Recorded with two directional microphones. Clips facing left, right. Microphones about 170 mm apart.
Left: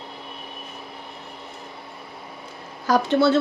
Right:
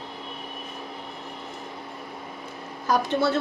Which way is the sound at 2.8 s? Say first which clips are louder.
Left 5 dB; 90° left.